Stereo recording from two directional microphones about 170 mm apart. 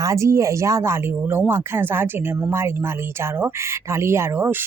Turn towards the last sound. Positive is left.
turn(degrees=-15)  # may be behind; listen again after turning